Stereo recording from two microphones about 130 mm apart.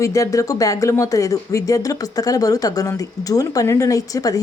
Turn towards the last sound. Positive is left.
turn(degrees=30)  # may be behind; listen again after turning